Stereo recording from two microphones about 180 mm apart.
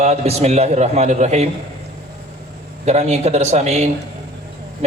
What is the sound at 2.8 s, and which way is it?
A man's voice, 40° right (ahead or behind).